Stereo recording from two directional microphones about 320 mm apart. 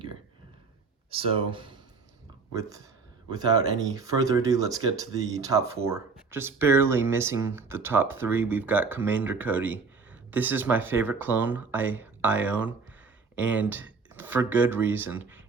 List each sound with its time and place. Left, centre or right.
1.1 s speech: centre